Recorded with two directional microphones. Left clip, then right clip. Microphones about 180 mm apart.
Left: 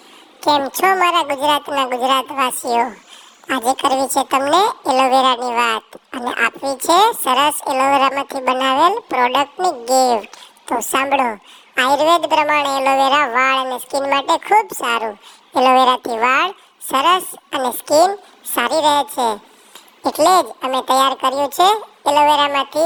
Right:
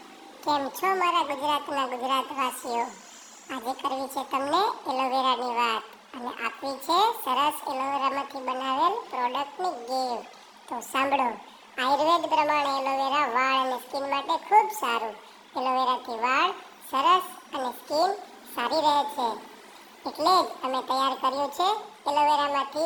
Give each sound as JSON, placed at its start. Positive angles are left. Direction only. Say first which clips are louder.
{"t": 0.4, "sound": "a woman's voice", "louder": "left 11 dB", "side_deg": 45}